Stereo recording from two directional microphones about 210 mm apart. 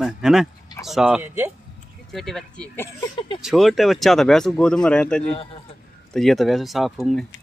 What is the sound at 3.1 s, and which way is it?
Speech, 25° left (ahead or behind).